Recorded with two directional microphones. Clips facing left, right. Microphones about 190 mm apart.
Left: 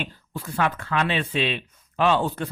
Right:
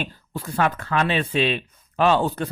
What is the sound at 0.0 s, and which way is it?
Speech, 40° right (ahead or behind).